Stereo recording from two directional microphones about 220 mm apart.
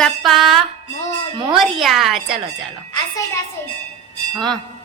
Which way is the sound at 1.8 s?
Centre (ahead or behind).